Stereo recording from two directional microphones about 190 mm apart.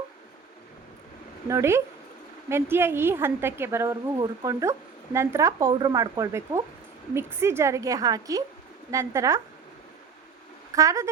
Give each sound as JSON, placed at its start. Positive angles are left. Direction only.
{"t": 1.5, "sound": "a woman's voice", "side_deg": -15}
{"t": 10.8, "sound": "a woman's voice", "side_deg": -15}